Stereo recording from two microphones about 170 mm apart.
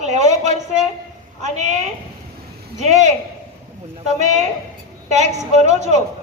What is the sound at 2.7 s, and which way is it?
Speech, 45° right (ahead or behind).